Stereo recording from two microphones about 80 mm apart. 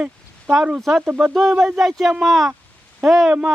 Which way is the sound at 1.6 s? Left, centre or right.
Centre.